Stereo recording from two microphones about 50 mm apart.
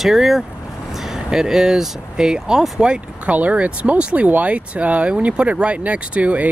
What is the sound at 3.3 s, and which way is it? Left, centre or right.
Speech, right.